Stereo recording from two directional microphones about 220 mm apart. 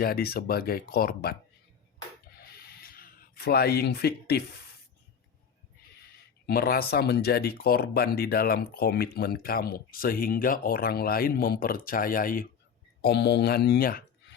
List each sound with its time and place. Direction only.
0.0 s speech: 45° left (ahead or behind)
2.4 s a sound: 45° left (ahead or behind)
6.5 s speech: 45° left (ahead or behind)
13.0 s speech: 50° left (ahead or behind)